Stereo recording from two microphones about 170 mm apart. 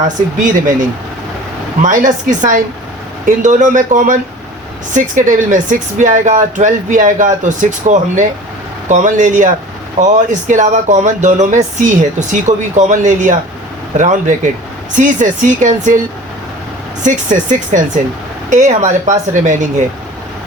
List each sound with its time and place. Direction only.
0.3 s speech: 50° right (ahead or behind)
17.0 s speech: 45° right (ahead or behind)